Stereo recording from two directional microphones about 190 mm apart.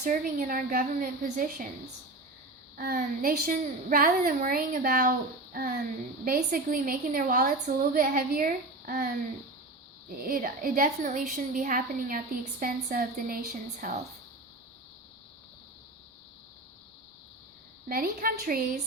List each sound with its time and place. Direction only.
0.0 s a woman's voice: 50° right (ahead or behind)
2.7 s a woman's voice: 50° right (ahead or behind)
6.2 s a woman's voice: 50° right (ahead or behind)
10.2 s a woman's voice: 50° right (ahead or behind)
17.8 s a woman's voice: 50° right (ahead or behind)